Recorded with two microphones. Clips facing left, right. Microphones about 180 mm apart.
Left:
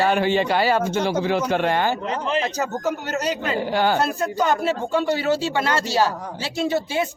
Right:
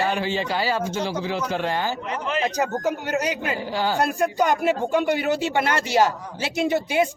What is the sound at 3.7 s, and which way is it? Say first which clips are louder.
Speech: left 5 dB; 60° left (ahead or behind).